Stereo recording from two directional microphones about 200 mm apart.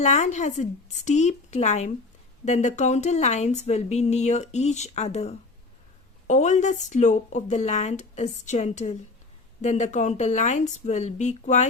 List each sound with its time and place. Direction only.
0.0 s speech: 35° left (ahead or behind)